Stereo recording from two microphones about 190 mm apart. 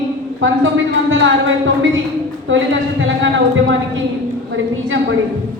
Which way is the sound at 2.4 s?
85° right.